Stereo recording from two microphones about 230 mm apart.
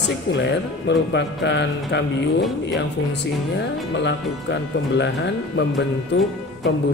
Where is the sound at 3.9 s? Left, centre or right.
Left.